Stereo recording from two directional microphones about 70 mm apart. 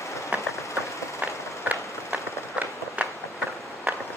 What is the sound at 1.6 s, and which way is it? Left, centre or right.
Run, right.